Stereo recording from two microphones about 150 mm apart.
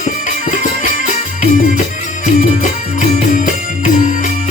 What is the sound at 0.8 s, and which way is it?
Music, 55° left (ahead or behind).